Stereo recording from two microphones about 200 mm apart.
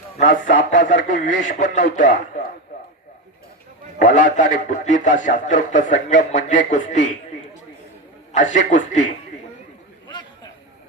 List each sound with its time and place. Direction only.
0.2 s a man's voice: 40° left (ahead or behind)
3.9 s a man's voice: 40° left (ahead or behind)
8.3 s a man's voice: 40° left (ahead or behind)
10.1 s a sound: 20° left (ahead or behind)